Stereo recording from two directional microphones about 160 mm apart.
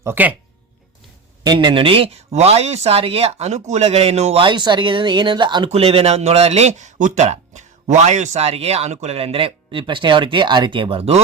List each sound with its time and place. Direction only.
0.0 s speech: 10° right (ahead or behind)
1.5 s speech: 30° right (ahead or behind)